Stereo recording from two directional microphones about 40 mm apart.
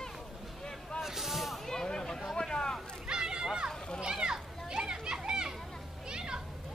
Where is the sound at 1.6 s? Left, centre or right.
Centre.